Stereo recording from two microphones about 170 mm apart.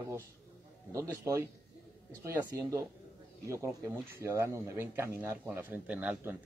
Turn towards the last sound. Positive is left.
turn(degrees=-10)  # may be behind; listen again after turning